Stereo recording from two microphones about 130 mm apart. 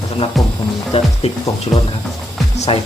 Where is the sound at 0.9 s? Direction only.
50° left (ahead or behind).